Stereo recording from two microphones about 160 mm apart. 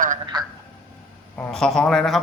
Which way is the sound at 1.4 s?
5° left (ahead or behind).